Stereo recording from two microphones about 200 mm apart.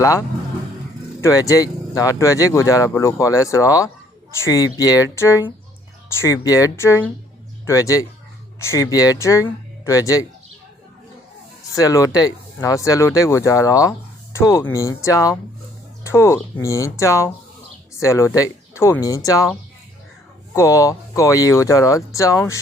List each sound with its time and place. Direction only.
0.0 s speech: 15° left (ahead or behind)
11.7 s speech: 15° left (ahead or behind)